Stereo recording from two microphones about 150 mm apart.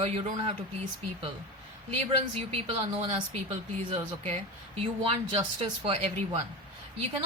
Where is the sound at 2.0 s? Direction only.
40° right (ahead or behind).